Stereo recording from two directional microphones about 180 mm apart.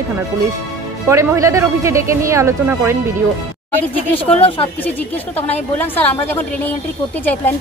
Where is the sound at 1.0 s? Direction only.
15° right (ahead or behind).